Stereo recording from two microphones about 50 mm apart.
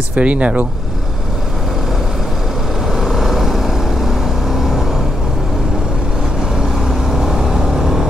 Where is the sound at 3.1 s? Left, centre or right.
Centre.